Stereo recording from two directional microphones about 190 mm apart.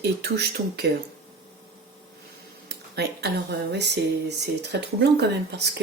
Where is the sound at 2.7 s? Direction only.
60° right (ahead or behind).